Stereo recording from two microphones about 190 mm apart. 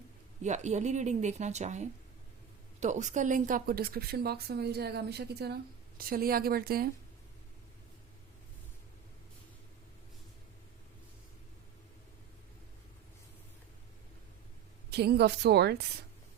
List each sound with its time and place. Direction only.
0.4 s a woman's voice: 40° right (ahead or behind)
14.8 s a woman's voice: 60° right (ahead or behind)